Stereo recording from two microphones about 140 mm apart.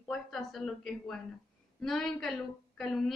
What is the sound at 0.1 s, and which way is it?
A woman's voice, centre (ahead or behind).